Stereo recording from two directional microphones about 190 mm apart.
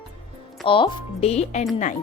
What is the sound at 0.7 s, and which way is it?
Speech, 25° left (ahead or behind).